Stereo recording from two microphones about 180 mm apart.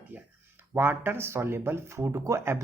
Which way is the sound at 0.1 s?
10° right (ahead or behind).